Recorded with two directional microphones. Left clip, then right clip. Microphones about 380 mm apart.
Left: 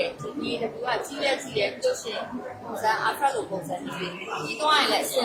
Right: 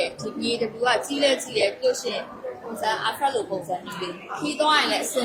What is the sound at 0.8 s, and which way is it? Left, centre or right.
Speech, right.